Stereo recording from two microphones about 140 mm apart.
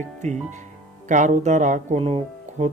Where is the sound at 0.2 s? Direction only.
55° right (ahead or behind).